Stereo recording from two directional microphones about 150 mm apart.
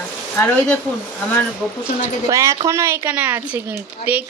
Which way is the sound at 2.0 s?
20° right (ahead or behind).